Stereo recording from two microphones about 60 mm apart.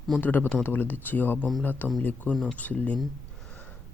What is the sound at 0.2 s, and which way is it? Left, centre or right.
A man's voice, left.